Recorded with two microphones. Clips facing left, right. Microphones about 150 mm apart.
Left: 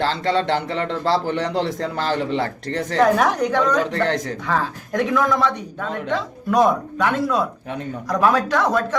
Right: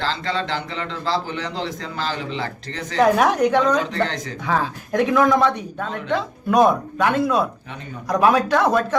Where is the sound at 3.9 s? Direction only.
60° left (ahead or behind).